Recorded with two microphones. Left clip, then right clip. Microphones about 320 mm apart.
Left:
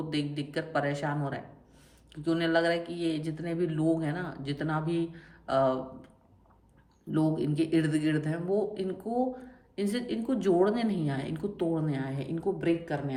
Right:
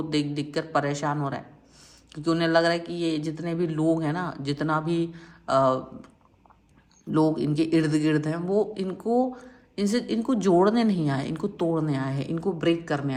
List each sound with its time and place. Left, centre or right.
0.1 s speech: centre
7.1 s speech: centre